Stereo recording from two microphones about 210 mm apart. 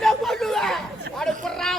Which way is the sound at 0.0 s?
Centre (ahead or behind).